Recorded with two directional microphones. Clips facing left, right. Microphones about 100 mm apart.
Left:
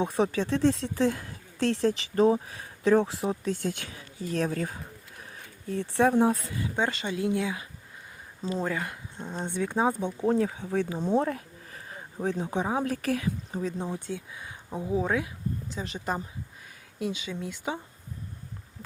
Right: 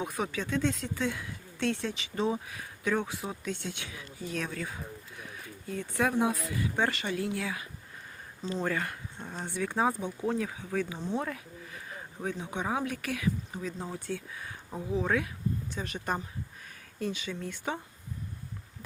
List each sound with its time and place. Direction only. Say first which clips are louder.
0.0 s speech: left 7 dB; 30° left (ahead or behind)
6.7 s speech: left 2 dB; 20° left (ahead or behind)
8.4 s speech: left 2 dB; 10° left (ahead or behind); by 13.7 s 35° left (ahead or behind)
13.9 s speech: left 2 dB; 20° left (ahead or behind)
17.0 s speech: left 2 dB; 15° left (ahead or behind)